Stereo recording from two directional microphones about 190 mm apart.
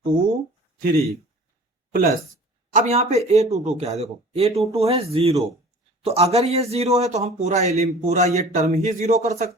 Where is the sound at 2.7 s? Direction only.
35° right (ahead or behind).